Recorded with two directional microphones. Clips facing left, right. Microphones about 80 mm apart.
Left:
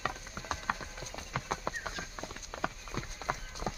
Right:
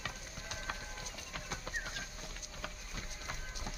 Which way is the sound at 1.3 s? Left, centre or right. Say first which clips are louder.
Left 10 dB; left.